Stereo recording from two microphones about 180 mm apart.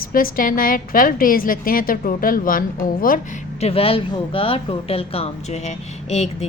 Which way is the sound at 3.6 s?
35° left (ahead or behind).